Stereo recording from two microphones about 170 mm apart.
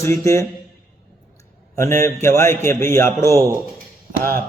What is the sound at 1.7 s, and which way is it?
A man's voice, 15° left (ahead or behind).